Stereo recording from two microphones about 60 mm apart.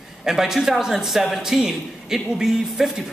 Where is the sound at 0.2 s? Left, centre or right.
Centre.